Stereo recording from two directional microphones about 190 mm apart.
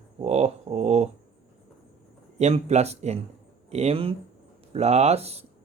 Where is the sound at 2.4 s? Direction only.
35° right (ahead or behind).